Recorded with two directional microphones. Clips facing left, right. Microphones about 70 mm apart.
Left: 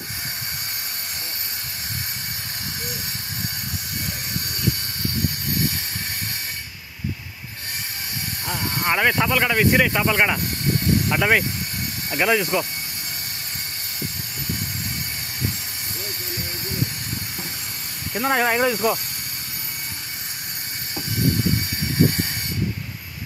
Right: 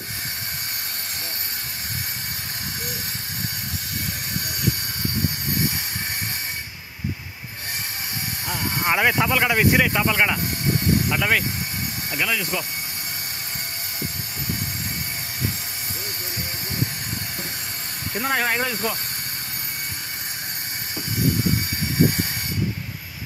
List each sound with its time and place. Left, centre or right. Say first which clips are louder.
8.6 s speech: even; centre
12.1 s speech: left 6 dB; left
18.2 s speech: left 4 dB; centre